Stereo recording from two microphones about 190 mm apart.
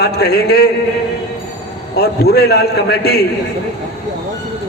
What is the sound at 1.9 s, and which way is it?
A man's voice, 55° left (ahead or behind).